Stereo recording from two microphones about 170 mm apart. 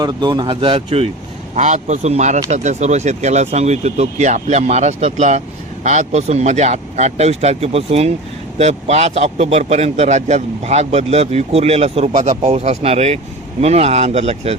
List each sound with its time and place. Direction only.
0.0 s speech: 25° right (ahead or behind)
1.5 s a man's voice: 45° right (ahead or behind)